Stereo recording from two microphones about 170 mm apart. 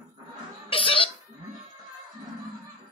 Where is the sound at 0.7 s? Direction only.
30° left (ahead or behind).